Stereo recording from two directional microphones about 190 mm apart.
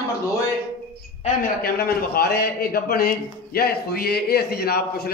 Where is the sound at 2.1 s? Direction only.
55° left (ahead or behind).